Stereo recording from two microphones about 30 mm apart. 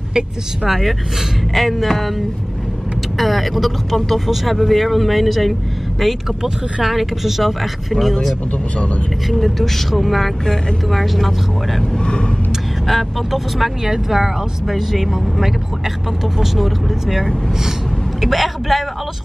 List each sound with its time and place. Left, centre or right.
1.5 s speech: centre
8.7 s speech: left
9.3 s speech: centre
12.0 s a sound: left
12.8 s speech: centre
13.8 s speech: centre